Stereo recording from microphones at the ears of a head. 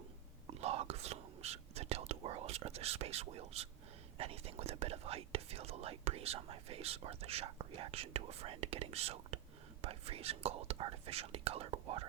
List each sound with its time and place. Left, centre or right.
0.4 s whispering: right
4.2 s speech: right